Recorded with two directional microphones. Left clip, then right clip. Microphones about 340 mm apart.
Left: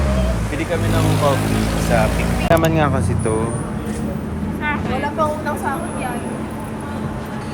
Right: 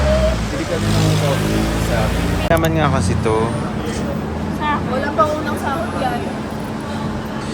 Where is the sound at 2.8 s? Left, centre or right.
Centre.